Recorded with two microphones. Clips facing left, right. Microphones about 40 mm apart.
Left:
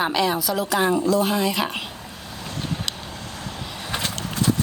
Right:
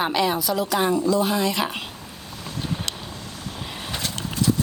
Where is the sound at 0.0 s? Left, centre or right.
Centre.